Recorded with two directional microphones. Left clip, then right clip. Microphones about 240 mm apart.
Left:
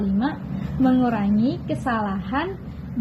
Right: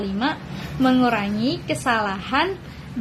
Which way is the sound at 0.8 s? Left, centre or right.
Right.